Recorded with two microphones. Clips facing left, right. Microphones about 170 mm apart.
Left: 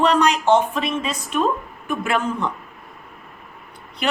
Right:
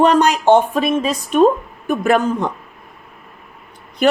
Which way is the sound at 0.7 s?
40° right (ahead or behind).